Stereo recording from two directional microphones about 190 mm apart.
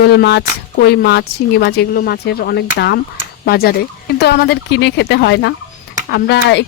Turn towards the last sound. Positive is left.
turn(degrees=65)  # may be behind; listen again after turning